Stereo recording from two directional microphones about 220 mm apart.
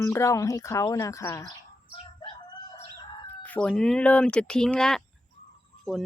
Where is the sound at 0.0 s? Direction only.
15° left (ahead or behind).